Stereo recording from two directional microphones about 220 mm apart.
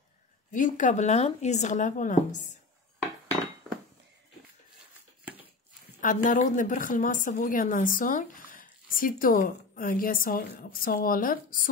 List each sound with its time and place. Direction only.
0.5 s a woman's voice: 35° left (ahead or behind)
5.9 s a woman's voice: 35° left (ahead or behind)